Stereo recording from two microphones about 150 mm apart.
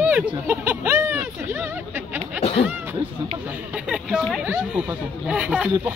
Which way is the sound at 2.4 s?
45° left (ahead or behind).